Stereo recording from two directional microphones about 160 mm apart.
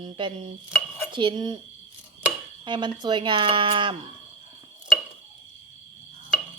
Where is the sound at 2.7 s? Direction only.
30° right (ahead or behind).